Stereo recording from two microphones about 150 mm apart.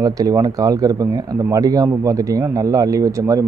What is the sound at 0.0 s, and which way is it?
A man's voice, 25° right (ahead or behind).